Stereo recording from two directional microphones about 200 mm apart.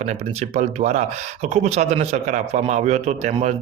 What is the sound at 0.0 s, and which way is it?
Speech, 35° right (ahead or behind).